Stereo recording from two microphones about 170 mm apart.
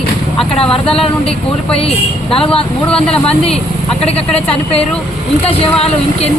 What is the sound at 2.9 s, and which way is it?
Speech, 5° left (ahead or behind).